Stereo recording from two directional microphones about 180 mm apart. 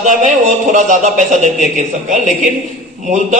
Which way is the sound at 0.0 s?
45° right (ahead or behind).